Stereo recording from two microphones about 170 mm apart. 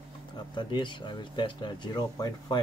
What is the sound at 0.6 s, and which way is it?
Speech, 25° left (ahead or behind).